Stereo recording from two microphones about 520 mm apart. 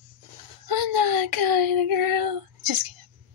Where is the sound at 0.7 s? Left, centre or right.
Right.